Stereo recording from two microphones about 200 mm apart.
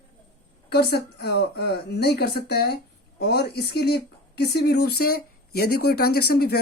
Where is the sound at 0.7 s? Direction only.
55° left (ahead or behind).